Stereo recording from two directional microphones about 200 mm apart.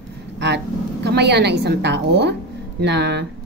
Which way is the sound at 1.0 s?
55° right (ahead or behind).